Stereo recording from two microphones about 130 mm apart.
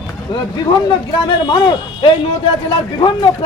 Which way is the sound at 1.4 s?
35° left (ahead or behind).